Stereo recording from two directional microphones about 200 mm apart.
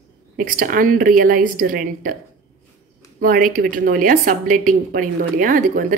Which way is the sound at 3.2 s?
45° right (ahead or behind).